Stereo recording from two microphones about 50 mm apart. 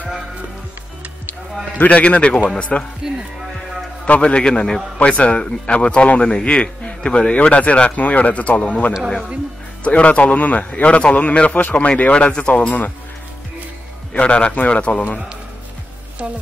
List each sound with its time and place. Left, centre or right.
1.8 s speech: left
3.0 s speech: centre
4.0 s a man's voice: left
14.1 s speech: left